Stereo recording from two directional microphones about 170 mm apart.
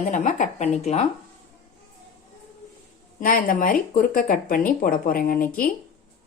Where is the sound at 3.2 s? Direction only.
55° left (ahead or behind).